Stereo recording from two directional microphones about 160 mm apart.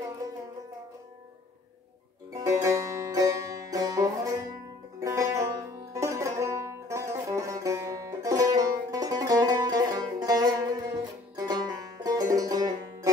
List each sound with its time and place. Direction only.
2.3 s music: 20° right (ahead or behind)